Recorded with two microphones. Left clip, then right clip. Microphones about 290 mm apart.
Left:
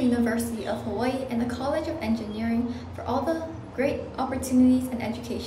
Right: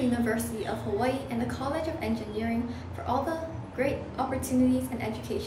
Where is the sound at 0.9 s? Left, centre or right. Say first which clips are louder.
Even; centre.